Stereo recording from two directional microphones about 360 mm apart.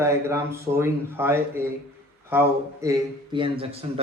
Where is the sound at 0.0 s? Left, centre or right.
Centre.